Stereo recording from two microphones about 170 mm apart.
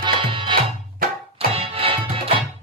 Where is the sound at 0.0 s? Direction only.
30° right (ahead or behind).